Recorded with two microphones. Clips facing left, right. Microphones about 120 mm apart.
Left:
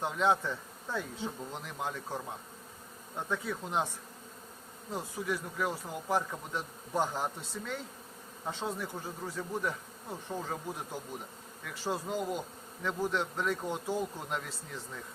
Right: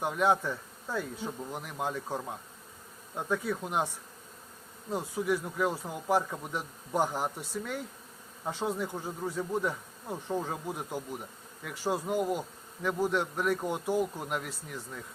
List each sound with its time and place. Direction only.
0.0 s bee: 10° right (ahead or behind)
4.9 s bee: 15° right (ahead or behind)